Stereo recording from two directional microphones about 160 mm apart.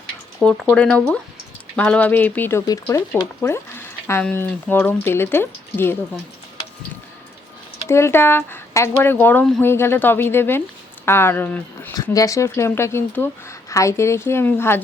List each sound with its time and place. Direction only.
0.3 s speech: centre (ahead or behind)
7.9 s speech: 15° left (ahead or behind)